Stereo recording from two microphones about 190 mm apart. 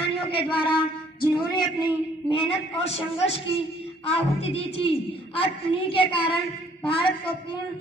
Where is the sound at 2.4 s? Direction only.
30° left (ahead or behind).